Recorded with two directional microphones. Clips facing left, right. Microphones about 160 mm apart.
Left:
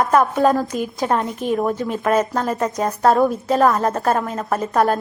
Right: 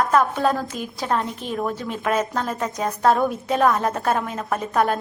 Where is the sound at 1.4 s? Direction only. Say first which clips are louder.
Left 8 dB; 45° left (ahead or behind).